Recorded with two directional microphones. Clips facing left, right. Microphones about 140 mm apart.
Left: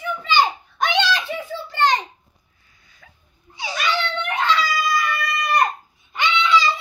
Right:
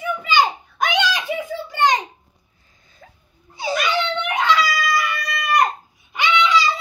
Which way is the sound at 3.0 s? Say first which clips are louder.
Right 6 dB; 30° right (ahead or behind).